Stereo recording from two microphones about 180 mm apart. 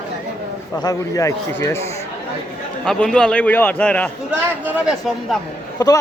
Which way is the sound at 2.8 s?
5° left (ahead or behind).